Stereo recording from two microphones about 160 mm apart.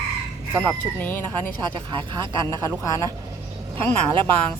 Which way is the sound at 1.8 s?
30° right (ahead or behind).